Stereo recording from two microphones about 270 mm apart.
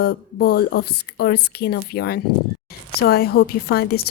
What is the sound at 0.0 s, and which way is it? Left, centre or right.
A woman's voice, left.